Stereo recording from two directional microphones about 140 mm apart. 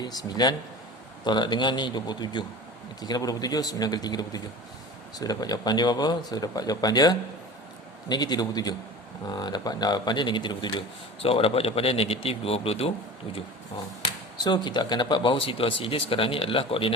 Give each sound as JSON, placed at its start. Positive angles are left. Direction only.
{"t": 0.0, "sound": "speech", "side_deg": 30}
{"t": 11.2, "sound": "a man's voice", "side_deg": 45}
{"t": 14.4, "sound": "speech", "side_deg": 35}